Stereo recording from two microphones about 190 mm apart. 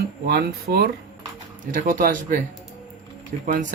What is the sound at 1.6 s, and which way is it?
Speech, 45° right (ahead or behind).